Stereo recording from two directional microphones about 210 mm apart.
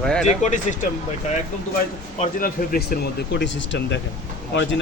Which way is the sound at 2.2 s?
40° left (ahead or behind).